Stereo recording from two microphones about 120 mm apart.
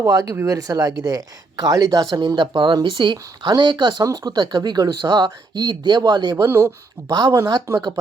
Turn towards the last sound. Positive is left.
turn(degrees=-25)  # may be behind; listen again after turning